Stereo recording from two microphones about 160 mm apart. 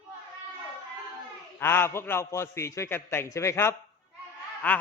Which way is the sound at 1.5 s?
15° left (ahead or behind).